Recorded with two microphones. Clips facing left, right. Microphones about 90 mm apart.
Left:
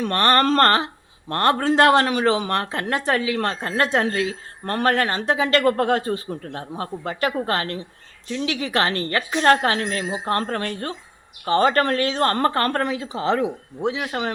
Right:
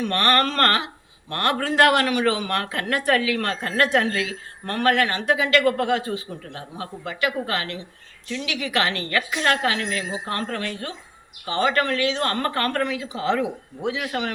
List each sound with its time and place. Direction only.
0.0 s speech: 35° left (ahead or behind)